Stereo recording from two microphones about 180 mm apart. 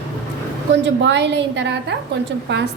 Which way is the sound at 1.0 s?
75° right (ahead or behind).